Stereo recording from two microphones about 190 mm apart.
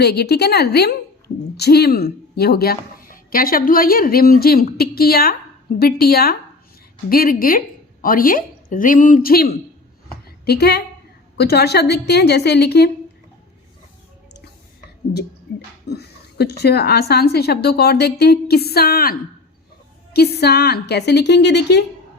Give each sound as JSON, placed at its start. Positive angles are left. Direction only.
{"t": 0.0, "sound": "a woman's voice", "side_deg": 60}
{"t": 15.5, "sound": "a sound", "side_deg": 60}
{"t": 15.9, "sound": "a woman's voice", "side_deg": 60}
{"t": 20.1, "sound": "a woman's voice", "side_deg": 55}